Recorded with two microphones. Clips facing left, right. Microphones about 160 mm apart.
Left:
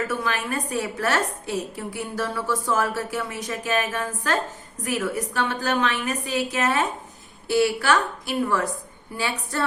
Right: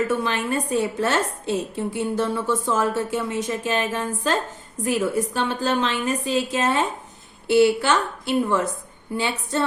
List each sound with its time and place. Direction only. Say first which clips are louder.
0.1 s a woman's voice: right 3 dB; 25° right (ahead or behind)